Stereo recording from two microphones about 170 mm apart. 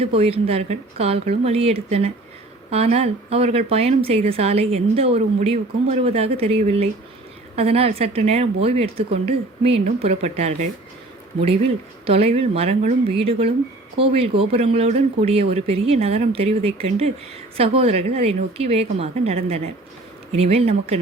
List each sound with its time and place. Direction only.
0.0 s speech: 35° right (ahead or behind)
12.0 s speech: 35° right (ahead or behind)